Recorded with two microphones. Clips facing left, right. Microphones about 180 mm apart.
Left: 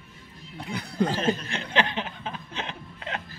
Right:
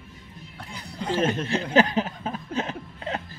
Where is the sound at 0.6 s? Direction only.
65° left (ahead or behind).